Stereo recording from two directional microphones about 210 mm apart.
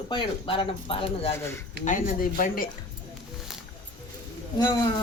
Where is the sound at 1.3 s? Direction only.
10° left (ahead or behind).